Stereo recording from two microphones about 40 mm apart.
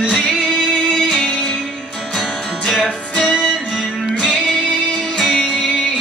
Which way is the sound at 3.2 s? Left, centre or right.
Left.